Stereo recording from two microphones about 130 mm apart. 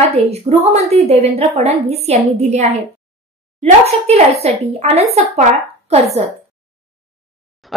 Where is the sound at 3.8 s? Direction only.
55° right (ahead or behind).